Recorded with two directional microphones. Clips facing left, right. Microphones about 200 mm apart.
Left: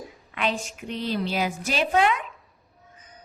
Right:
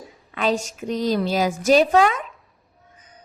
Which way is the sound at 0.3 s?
40° right (ahead or behind).